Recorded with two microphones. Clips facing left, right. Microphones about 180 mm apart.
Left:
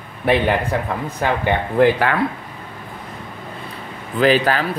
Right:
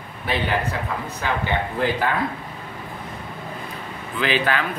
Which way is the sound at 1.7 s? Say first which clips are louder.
Left 9 dB; 70° left (ahead or behind).